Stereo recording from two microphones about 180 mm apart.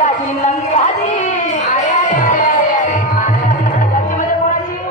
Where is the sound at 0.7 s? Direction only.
45° left (ahead or behind).